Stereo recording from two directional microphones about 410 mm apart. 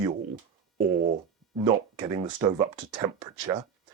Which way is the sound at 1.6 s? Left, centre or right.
Centre.